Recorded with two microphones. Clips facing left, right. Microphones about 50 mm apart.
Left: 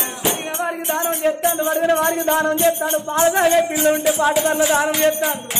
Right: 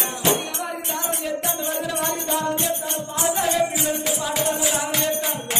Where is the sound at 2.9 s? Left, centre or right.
Left.